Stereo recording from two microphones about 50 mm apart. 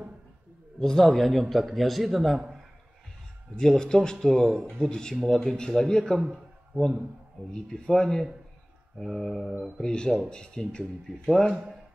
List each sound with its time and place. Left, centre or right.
0.7 s a man's voice: centre
3.5 s speech: centre
7.5 s a man's voice: centre
9.8 s speech: centre